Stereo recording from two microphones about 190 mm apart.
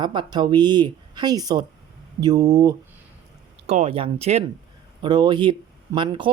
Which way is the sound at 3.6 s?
35° right (ahead or behind).